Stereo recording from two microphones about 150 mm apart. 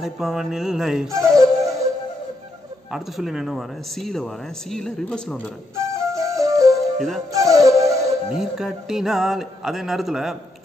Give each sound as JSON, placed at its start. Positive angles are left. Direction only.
{"t": 0.0, "sound": "speech", "side_deg": -5}
{"t": 1.1, "sound": "music", "side_deg": -20}
{"t": 2.9, "sound": "speech", "side_deg": 0}
{"t": 5.9, "sound": "music", "side_deg": -20}
{"t": 6.8, "sound": "music", "side_deg": 0}
{"t": 7.3, "sound": "music", "side_deg": -20}
{"t": 8.3, "sound": "speech", "side_deg": -5}